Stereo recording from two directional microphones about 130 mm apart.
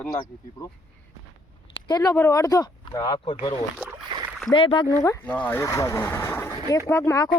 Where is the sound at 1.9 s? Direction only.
25° left (ahead or behind).